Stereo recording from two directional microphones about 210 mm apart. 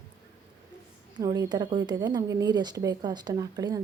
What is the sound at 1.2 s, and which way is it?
A woman's voice, 20° right (ahead or behind).